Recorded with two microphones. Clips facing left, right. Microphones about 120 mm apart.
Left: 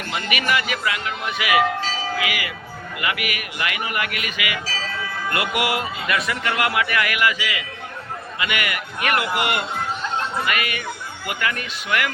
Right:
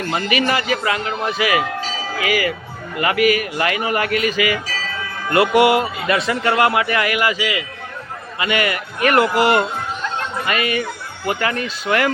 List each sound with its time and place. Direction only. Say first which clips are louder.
0.1 s a man's voice: right 3 dB; 30° right (ahead or behind)